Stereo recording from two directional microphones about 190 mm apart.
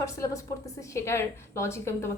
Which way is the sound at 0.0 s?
15° left (ahead or behind).